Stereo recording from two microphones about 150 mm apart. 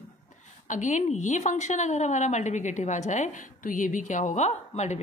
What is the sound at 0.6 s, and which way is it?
A woman's voice, 55° left (ahead or behind).